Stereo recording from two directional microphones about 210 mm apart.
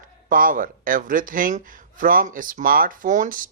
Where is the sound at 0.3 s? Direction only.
40° right (ahead or behind).